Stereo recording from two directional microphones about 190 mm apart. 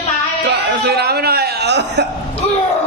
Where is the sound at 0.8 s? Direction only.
55° right (ahead or behind).